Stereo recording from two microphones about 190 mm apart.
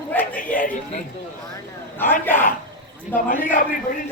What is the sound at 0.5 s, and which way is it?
Speech, 45° left (ahead or behind).